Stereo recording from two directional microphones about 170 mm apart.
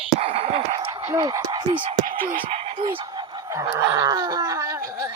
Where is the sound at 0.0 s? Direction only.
35° right (ahead or behind).